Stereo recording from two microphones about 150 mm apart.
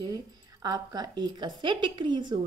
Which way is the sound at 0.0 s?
25° right (ahead or behind).